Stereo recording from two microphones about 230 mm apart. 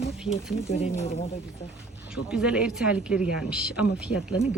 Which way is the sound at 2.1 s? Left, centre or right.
Centre.